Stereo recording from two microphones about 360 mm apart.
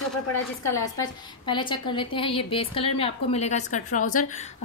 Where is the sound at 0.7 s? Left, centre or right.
Centre.